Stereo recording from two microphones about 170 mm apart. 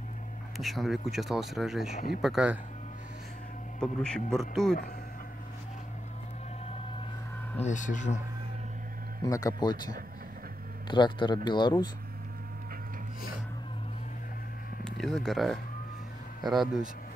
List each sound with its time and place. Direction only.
0.6 s speech: centre (ahead or behind)
3.8 s speech: 5° left (ahead or behind)
7.6 s speech: 50° left (ahead or behind)
9.2 s speech: 20° left (ahead or behind)
14.9 s speech: centre (ahead or behind)